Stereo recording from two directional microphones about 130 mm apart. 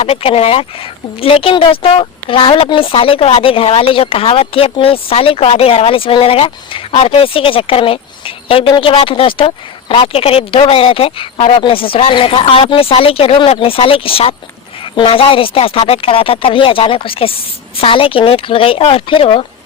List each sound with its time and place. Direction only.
0.0 s speech: 50° left (ahead or behind)